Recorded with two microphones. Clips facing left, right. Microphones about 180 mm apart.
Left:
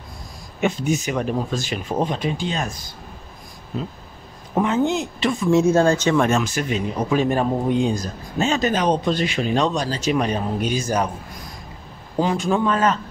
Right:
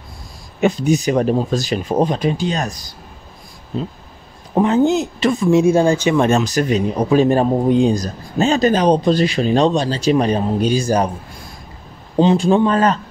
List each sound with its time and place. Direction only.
0.6 s a man's voice: 35° right (ahead or behind)
3.7 s a man's voice: 30° right (ahead or behind)
5.5 s speech: 15° right (ahead or behind)
6.2 s a man's voice: 35° right (ahead or behind)
12.2 s a man's voice: 25° right (ahead or behind)